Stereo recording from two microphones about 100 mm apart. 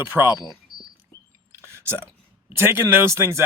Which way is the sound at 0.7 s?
50° right (ahead or behind).